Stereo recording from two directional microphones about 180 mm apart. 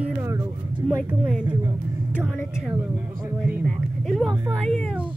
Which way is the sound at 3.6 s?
Centre (ahead or behind).